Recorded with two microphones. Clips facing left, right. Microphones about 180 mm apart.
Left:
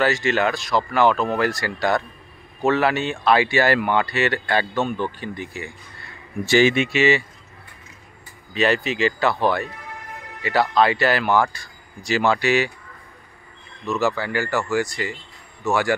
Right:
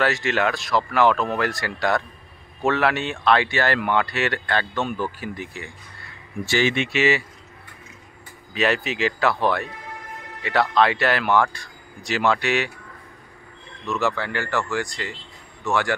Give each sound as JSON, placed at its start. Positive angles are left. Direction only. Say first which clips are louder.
{"t": 0.0, "sound": "speech", "louder": "left 2 dB", "side_deg": 0}
{"t": 4.5, "sound": "speech", "louder": "left 3 dB", "side_deg": 10}
{"t": 4.8, "sound": "speech", "louder": "left 2 dB", "side_deg": -5}
{"t": 6.4, "sound": "speech", "louder": "left 5 dB", "side_deg": 20}
{"t": 6.7, "sound": "speech", "louder": "left 2 dB", "side_deg": 5}
{"t": 8.5, "sound": "speech", "louder": "left 2 dB", "side_deg": 0}
{"t": 13.8, "sound": "speech", "louder": "left 2 dB", "side_deg": 5}